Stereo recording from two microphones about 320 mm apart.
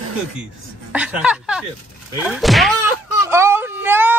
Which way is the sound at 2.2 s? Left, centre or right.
Centre.